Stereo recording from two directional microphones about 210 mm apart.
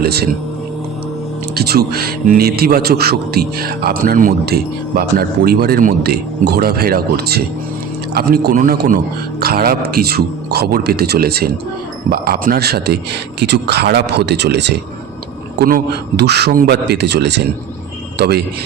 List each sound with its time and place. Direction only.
0.0 s speech: 50° right (ahead or behind)
1.5 s speech: 50° right (ahead or behind)